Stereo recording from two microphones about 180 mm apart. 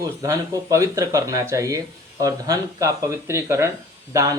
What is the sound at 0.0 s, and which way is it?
Speech, 20° right (ahead or behind).